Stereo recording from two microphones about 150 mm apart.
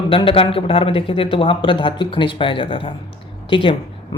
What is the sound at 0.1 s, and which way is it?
Speech, 35° left (ahead or behind).